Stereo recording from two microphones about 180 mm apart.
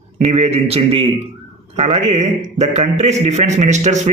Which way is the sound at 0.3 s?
35° right (ahead or behind).